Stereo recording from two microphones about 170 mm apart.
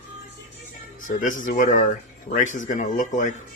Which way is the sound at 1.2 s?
50° left (ahead or behind).